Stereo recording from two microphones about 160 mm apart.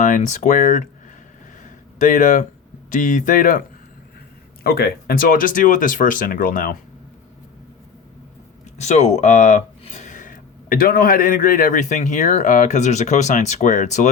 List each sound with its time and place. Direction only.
0.0 s speech: 50° left (ahead or behind)
2.0 s speech: 55° left (ahead or behind)
4.6 s speech: 70° left (ahead or behind)
8.8 s speech: 45° left (ahead or behind)